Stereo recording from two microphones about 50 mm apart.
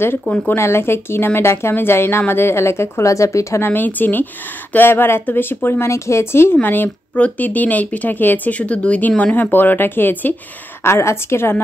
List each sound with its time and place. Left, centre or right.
0.3 s speech: left
0.6 s speech: left
3.6 s speech: left
5.9 s speech: left
6.5 s speech: left
7.2 s speech: left
8.5 s speech: left
10.8 s speech: left